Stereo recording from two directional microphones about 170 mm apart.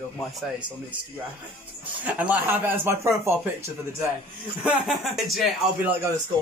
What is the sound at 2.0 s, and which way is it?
Speech, 10° right (ahead or behind).